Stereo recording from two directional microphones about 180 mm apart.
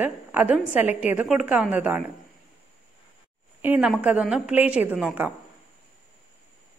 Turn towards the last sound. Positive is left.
turn(degrees=-5)  # may be behind; listen again after turning